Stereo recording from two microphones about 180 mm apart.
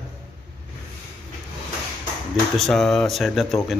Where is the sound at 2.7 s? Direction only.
Centre (ahead or behind).